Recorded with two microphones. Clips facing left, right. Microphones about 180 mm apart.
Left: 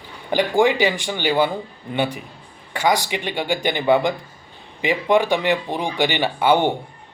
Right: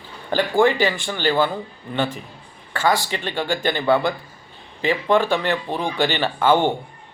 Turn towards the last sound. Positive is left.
turn(degrees=15)  # may be behind; listen again after turning